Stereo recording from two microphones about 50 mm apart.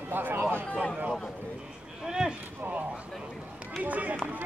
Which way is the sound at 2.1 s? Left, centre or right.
Centre.